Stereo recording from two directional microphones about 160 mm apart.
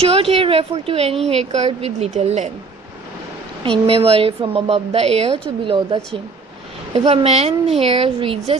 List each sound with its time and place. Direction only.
0.0 s a woman's voice: 35° right (ahead or behind)
3.8 s a woman's voice: 35° right (ahead or behind)
7.0 s a woman's voice: 40° right (ahead or behind)